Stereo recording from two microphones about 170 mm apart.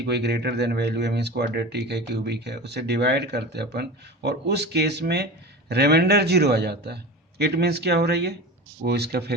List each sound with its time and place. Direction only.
0.0 s speech: 75° right (ahead or behind)